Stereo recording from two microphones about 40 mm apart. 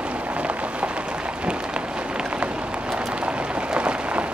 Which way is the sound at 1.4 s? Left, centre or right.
Right.